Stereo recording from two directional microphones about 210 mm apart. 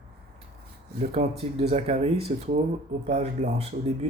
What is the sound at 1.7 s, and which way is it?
Mantra, 30° right (ahead or behind).